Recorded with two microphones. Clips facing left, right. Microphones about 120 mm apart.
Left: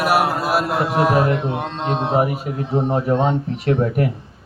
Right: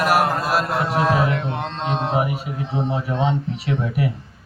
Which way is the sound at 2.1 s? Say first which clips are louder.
Left 3 dB; 40° left (ahead or behind).